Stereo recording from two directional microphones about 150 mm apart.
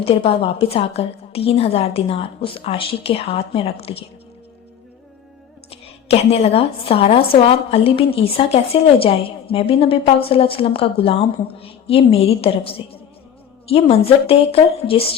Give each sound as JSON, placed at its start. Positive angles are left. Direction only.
{"t": 0.0, "sound": "a woman's voice", "side_deg": 40}
{"t": 5.8, "sound": "a woman's voice", "side_deg": 40}